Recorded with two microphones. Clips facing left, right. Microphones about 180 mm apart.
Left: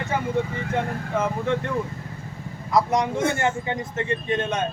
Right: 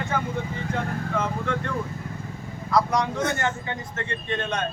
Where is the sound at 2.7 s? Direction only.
20° left (ahead or behind).